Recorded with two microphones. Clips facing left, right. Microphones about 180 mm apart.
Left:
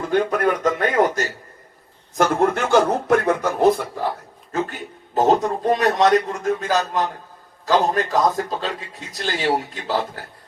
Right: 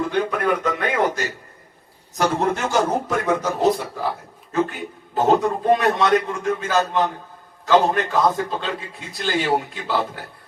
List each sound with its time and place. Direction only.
0.1 s a man's voice: 45° left (ahead or behind)
2.1 s a man's voice: 55° left (ahead or behind)
5.1 s a man's voice: 40° left (ahead or behind)